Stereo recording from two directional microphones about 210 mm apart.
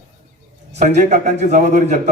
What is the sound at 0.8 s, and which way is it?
A man's voice, 35° right (ahead or behind).